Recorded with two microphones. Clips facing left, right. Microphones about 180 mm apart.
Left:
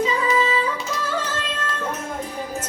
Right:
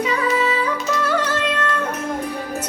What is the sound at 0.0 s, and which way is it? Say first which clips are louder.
Music: right 1 dB; 65° right (ahead or behind).